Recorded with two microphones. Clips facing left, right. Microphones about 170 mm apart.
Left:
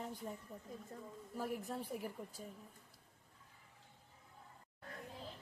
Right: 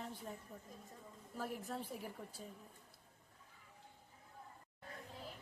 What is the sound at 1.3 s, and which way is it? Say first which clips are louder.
Speech: left 2 dB; 10° left (ahead or behind).